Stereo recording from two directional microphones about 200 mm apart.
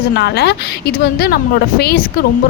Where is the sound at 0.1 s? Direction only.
55° left (ahead or behind).